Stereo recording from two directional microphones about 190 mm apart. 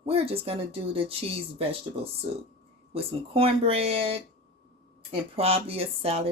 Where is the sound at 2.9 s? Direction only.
30° right (ahead or behind).